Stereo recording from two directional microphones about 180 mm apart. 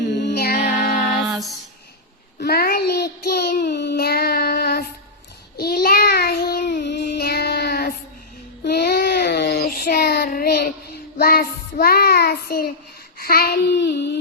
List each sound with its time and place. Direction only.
0.1 s music: 70° left (ahead or behind)
1.3 s music: centre (ahead or behind)
2.4 s child singing: 60° left (ahead or behind)